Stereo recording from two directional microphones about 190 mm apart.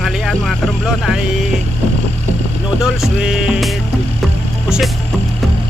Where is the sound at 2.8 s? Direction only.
5° right (ahead or behind).